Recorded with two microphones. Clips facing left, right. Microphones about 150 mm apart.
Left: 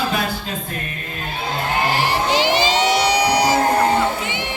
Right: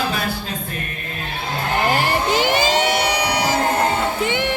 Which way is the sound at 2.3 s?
50° right (ahead or behind).